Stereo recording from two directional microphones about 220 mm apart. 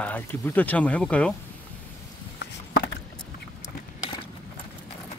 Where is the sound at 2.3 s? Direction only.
45° left (ahead or behind).